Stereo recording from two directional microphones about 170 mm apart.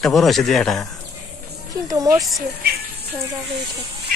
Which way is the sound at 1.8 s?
20° right (ahead or behind).